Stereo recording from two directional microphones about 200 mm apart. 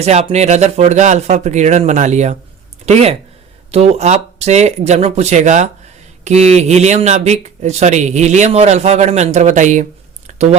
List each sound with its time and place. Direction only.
0.0 s speech: 30° right (ahead or behind)
3.7 s speech: 30° right (ahead or behind)
10.2 s a sound: 35° right (ahead or behind)